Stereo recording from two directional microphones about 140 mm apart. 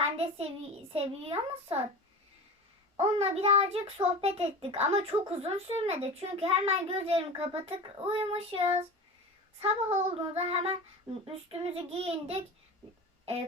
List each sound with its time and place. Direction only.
0.0 s a child's voice: 45° right (ahead or behind)
3.0 s a child's voice: 50° right (ahead or behind)